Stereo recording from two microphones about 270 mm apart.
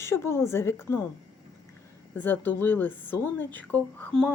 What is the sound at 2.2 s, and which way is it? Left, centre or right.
A woman's voice, centre.